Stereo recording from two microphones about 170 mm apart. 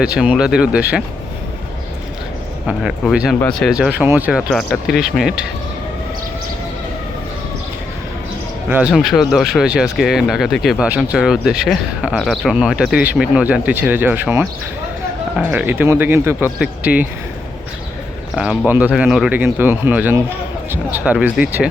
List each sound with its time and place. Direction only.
0.0 s speech: 5° right (ahead or behind)
2.6 s speech: 5° right (ahead or behind)
8.7 s speech: 5° right (ahead or behind)
18.3 s speech: 5° right (ahead or behind)